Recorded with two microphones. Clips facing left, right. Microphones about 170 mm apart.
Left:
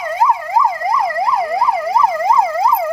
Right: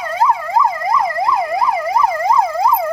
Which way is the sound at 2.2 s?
Centre (ahead or behind).